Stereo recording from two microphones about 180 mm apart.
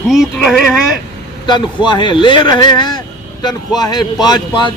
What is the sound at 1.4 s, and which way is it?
A man's voice, 25° left (ahead or behind).